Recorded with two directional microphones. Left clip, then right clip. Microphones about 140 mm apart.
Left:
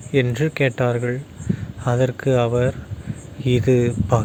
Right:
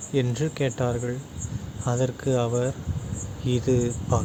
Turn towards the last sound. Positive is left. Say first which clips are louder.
# left 6 dB
turn(degrees=25)  # may be behind; listen again after turning